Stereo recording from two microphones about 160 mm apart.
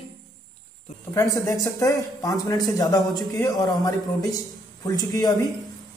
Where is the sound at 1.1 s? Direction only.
20° left (ahead or behind).